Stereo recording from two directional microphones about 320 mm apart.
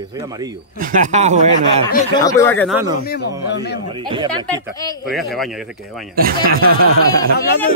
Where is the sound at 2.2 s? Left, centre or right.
Centre.